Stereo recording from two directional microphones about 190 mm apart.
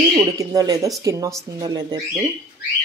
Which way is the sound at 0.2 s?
20° right (ahead or behind).